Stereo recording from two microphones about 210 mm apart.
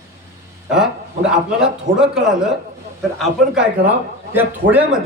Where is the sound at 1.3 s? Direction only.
5° right (ahead or behind).